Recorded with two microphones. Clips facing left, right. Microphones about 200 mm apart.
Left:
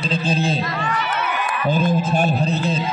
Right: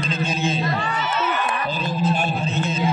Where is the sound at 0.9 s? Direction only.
65° left (ahead or behind).